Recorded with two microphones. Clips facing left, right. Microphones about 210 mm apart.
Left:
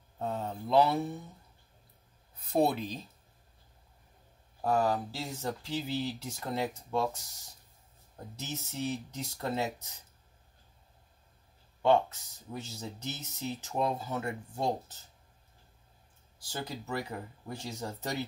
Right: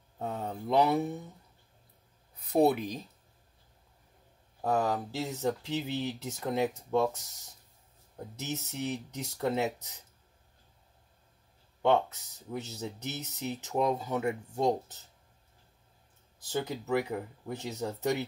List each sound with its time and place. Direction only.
0.2 s speech: 15° right (ahead or behind)
2.5 s speech: 15° right (ahead or behind)
4.6 s speech: 20° right (ahead or behind)
8.4 s speech: 20° right (ahead or behind)
12.5 s speech: 20° right (ahead or behind)
16.5 s speech: 20° right (ahead or behind)